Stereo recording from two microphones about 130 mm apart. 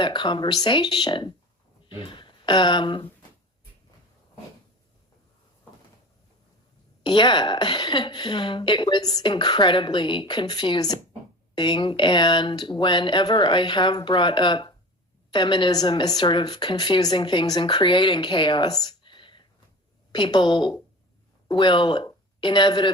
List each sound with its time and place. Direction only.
0.0 s speech: 35° left (ahead or behind)
7.0 s speech: 35° left (ahead or behind)